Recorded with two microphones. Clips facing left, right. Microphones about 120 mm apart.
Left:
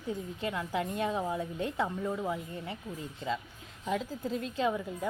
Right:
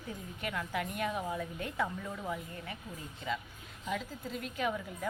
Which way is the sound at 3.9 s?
30° left (ahead or behind).